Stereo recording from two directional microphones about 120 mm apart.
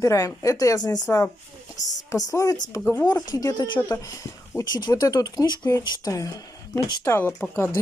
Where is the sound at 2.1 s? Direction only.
30° left (ahead or behind).